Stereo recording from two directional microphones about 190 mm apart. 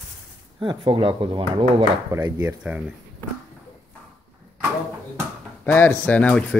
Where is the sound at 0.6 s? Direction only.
25° right (ahead or behind).